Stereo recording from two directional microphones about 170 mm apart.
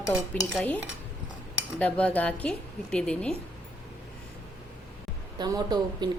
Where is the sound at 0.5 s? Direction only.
10° left (ahead or behind).